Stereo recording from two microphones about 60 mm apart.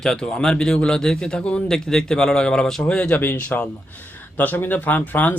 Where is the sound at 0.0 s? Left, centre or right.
Centre.